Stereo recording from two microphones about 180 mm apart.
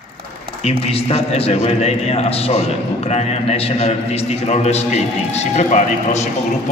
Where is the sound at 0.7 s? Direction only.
35° left (ahead or behind).